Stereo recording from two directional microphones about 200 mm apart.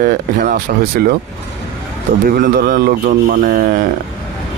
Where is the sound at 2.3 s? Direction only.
45° right (ahead or behind).